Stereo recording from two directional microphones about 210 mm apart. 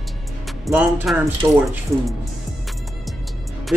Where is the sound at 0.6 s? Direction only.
Centre (ahead or behind).